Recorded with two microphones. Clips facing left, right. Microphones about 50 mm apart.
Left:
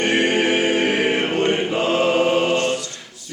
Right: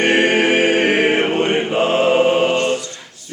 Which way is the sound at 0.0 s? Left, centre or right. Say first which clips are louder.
Right 4 dB; right.